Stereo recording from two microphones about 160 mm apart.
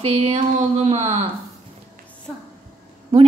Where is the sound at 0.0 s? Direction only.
40° right (ahead or behind).